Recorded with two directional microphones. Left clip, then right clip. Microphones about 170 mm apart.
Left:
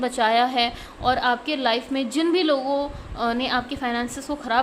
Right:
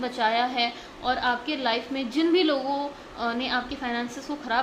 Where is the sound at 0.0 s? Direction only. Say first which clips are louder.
Left 5 dB; 30° left (ahead or behind).